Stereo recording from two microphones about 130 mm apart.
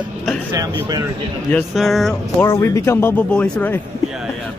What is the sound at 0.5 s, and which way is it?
Speech, 30° right (ahead or behind).